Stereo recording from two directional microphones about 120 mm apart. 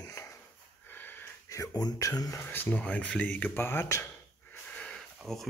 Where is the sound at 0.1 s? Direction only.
25° left (ahead or behind).